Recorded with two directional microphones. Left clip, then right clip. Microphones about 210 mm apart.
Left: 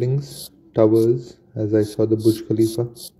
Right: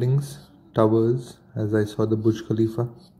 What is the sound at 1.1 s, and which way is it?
Speech, 35° left (ahead or behind).